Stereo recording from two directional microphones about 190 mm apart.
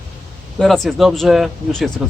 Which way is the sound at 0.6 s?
Centre (ahead or behind).